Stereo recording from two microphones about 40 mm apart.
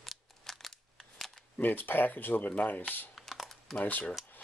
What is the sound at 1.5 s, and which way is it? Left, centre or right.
Speech, left.